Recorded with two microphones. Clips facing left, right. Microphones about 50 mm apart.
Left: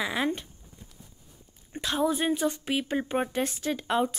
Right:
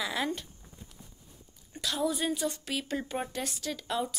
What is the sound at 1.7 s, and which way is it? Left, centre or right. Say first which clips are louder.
A woman's voice: left 4 dB; left.